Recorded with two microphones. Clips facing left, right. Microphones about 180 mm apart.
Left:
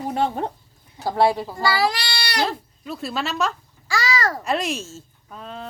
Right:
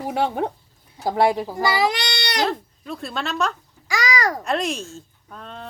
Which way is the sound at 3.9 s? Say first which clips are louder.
Right 1 dB; 15° right (ahead or behind).